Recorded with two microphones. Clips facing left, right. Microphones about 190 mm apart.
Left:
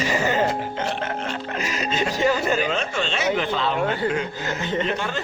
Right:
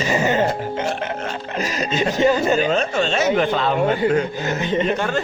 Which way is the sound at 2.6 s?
40° right (ahead or behind).